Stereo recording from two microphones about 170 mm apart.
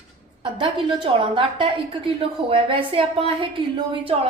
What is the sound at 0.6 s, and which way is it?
A woman's voice, 30° right (ahead or behind).